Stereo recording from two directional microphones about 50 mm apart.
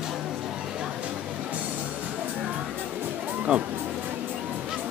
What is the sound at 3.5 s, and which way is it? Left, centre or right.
Speech, right.